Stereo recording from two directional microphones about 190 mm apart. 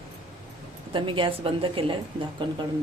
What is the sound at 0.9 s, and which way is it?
A woman's voice, 25° right (ahead or behind).